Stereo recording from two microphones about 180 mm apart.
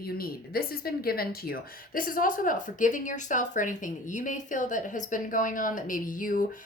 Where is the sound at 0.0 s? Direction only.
55° left (ahead or behind).